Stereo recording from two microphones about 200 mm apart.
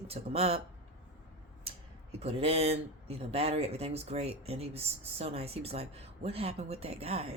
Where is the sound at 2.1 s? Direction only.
30° right (ahead or behind).